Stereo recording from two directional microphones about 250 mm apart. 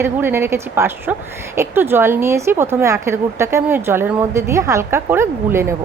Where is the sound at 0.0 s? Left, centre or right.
Centre.